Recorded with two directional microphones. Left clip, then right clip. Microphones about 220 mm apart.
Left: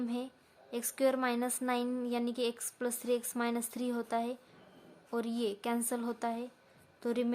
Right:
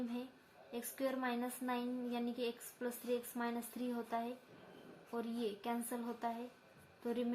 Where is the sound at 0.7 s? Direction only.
50° left (ahead or behind).